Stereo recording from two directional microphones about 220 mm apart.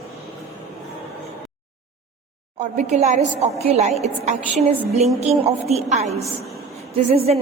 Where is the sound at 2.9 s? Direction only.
30° right (ahead or behind).